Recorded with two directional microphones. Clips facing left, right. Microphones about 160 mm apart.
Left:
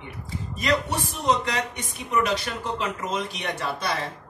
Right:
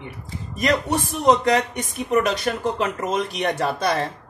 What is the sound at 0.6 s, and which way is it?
A man's voice, 45° right (ahead or behind).